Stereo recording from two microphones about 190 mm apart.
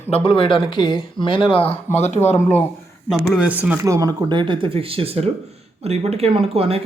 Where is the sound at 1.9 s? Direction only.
35° left (ahead or behind).